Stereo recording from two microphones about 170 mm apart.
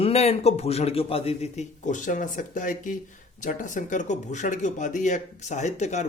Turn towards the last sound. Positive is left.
turn(degrees=40)  # may be behind; listen again after turning